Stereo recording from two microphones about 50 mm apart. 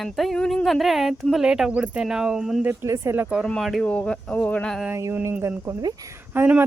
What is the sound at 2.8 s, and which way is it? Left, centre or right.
Speech, right.